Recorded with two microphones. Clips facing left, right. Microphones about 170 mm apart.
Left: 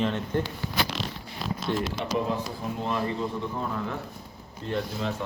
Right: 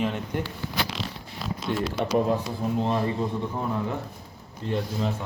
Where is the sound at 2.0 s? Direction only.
45° right (ahead or behind).